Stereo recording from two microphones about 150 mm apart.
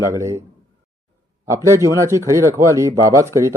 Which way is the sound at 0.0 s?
20° right (ahead or behind).